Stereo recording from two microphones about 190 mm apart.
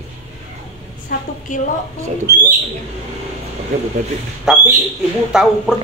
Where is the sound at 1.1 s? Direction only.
45° left (ahead or behind).